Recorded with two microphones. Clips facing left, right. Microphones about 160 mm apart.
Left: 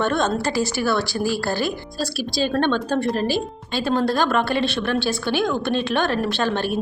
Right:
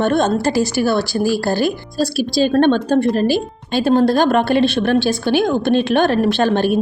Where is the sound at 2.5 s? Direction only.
45° right (ahead or behind).